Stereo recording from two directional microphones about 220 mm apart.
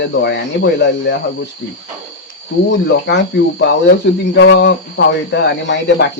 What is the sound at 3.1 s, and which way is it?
Speech, 55° left (ahead or behind).